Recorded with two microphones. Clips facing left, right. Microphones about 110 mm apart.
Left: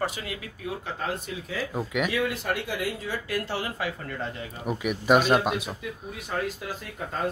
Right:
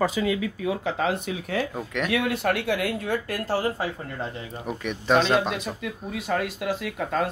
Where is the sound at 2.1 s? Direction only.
65° right (ahead or behind).